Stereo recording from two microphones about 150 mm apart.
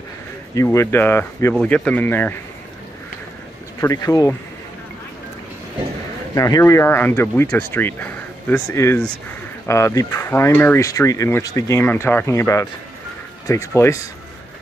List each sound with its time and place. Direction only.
0.7 s speech: 15° left (ahead or behind)
3.8 s speech: 20° left (ahead or behind)
6.3 s speech: 20° left (ahead or behind)